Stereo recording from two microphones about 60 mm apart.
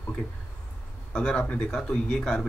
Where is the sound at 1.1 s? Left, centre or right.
Centre.